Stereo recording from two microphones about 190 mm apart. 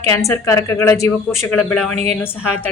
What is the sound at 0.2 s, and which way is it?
Speech, 15° left (ahead or behind).